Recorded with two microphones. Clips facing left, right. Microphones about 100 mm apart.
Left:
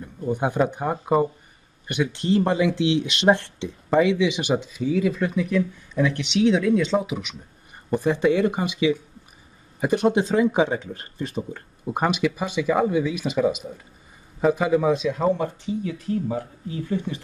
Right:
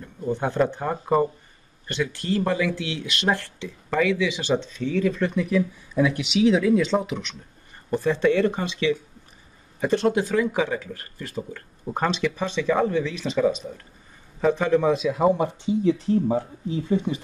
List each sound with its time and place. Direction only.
0.3 s speech: 15° left (ahead or behind)
11.8 s a man's voice: 10° left (ahead or behind); by 15.3 s 5° right (ahead or behind)
15.3 s speech: 20° right (ahead or behind)